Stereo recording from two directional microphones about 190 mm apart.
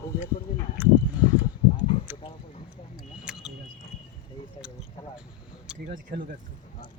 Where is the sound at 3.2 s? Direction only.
5° right (ahead or behind).